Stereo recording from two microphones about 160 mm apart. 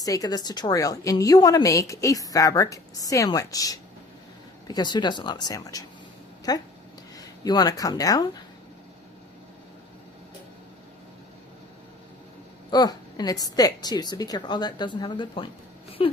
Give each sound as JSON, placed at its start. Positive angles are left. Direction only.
{"t": 0.0, "sound": "a woman's voice", "side_deg": 20}
{"t": 12.7, "sound": "a woman's voice", "side_deg": 25}